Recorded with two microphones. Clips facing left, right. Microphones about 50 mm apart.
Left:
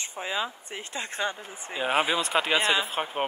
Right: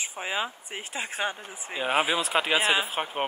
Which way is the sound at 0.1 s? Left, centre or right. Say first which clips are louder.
Left 1 dB; centre.